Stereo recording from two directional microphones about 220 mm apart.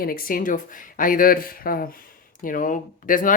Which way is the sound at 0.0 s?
40° left (ahead or behind).